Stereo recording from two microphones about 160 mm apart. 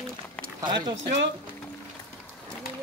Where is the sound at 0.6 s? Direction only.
25° right (ahead or behind).